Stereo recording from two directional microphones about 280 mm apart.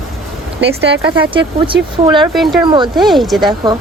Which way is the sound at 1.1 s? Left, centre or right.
Centre.